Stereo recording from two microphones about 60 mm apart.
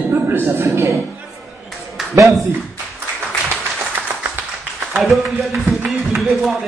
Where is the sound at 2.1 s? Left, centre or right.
Right.